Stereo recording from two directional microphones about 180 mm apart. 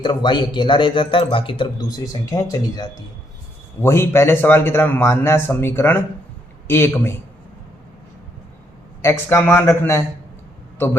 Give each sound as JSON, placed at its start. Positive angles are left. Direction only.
{"t": 0.0, "sound": "a man's voice", "side_deg": 25}
{"t": 9.0, "sound": "a man's voice", "side_deg": 15}